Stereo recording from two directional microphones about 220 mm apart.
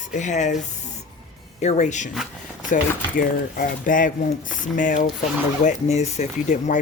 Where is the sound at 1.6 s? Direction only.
30° left (ahead or behind).